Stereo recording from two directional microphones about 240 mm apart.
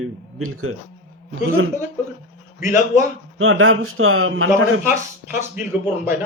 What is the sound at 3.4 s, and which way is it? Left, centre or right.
A man's voice, right.